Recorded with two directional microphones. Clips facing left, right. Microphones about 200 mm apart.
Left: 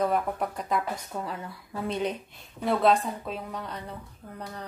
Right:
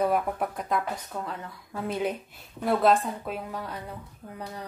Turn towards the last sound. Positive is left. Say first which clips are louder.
# right 1 dB
turn(degrees=-10)  # may be behind; listen again after turning